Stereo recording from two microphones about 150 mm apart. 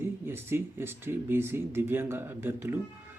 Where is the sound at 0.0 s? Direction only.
15° right (ahead or behind).